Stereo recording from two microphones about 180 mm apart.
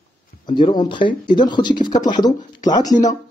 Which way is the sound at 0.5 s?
25° left (ahead or behind).